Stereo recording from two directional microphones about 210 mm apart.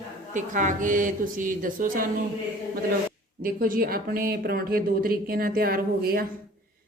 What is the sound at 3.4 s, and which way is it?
Speech, 45° right (ahead or behind).